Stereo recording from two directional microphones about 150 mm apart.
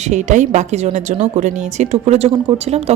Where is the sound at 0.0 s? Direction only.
50° right (ahead or behind).